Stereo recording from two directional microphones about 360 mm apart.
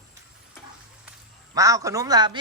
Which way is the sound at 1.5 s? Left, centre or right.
Centre.